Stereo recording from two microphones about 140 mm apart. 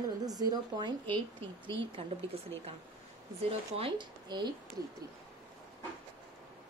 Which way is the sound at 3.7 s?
40° right (ahead or behind).